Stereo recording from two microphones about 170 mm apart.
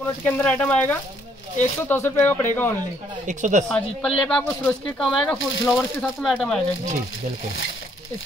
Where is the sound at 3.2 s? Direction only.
45° right (ahead or behind).